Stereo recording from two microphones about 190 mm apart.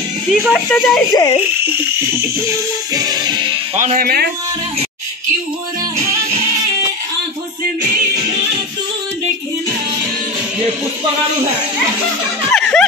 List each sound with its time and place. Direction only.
0.3 s speech: centre (ahead or behind)
1.1 s frog: 20° left (ahead or behind)
2.9 s music: 20° right (ahead or behind)
3.7 s speech: 40° right (ahead or behind)
12.5 s a sound: centre (ahead or behind)